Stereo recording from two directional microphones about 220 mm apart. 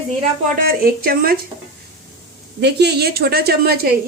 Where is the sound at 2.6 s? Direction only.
50° right (ahead or behind).